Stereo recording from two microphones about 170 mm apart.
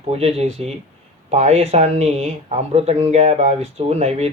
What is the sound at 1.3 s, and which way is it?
Speech, 40° right (ahead or behind).